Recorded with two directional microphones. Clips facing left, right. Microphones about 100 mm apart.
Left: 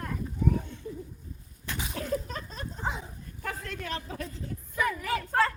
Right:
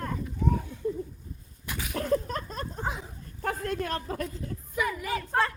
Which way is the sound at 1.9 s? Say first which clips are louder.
Right 6 dB; 45° right (ahead or behind).